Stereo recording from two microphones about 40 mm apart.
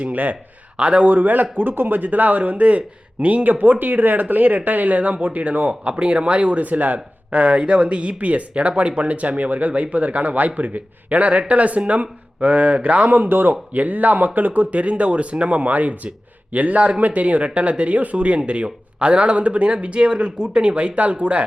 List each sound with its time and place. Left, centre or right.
0.0 s speech: right
0.8 s a man's voice: right
1.1 s speech: right
5.9 s speech: right
13.5 s speech: right